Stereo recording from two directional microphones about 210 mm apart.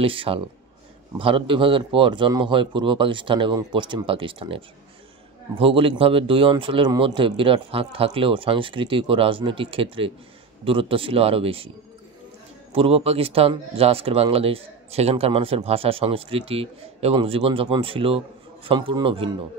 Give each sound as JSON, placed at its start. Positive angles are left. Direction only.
{"t": 0.0, "sound": "speech", "side_deg": -25}
{"t": 12.7, "sound": "speech", "side_deg": -25}